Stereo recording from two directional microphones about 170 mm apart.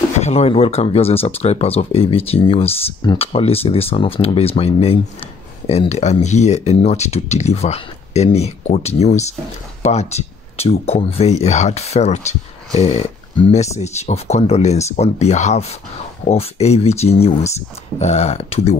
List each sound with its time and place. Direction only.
0.2 s speech: 40° left (ahead or behind)